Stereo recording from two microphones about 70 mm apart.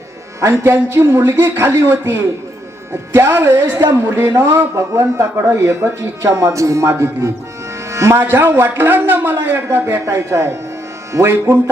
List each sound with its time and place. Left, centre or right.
0.5 s a woman's voice: right
7.9 s music: right
8.2 s speech: right